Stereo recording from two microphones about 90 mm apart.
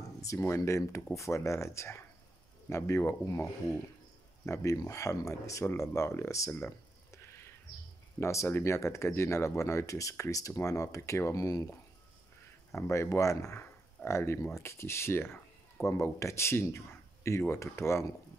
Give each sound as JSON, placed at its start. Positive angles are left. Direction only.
{"t": 0.2, "sound": "speech", "side_deg": 35}
{"t": 7.1, "sound": "a sound", "side_deg": 30}
{"t": 8.2, "sound": "speech", "side_deg": 30}
{"t": 12.7, "sound": "speech", "side_deg": 30}